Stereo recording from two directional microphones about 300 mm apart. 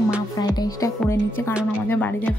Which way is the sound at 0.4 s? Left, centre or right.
Centre.